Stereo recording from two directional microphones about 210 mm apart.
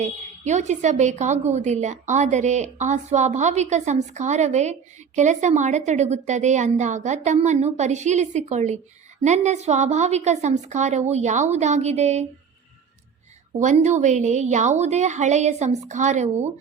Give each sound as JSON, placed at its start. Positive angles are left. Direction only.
{"t": 0.0, "sound": "a woman's voice", "side_deg": -35}
{"t": 13.6, "sound": "a woman's voice", "side_deg": -35}